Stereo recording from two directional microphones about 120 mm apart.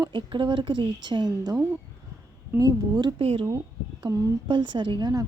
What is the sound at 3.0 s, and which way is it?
Speech, 35° right (ahead or behind).